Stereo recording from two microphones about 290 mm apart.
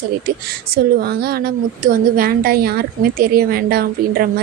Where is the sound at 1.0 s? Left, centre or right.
Right.